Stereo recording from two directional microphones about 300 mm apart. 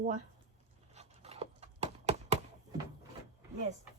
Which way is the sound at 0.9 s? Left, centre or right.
Right.